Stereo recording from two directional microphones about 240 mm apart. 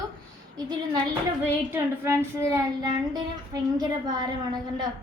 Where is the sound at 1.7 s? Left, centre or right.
Centre.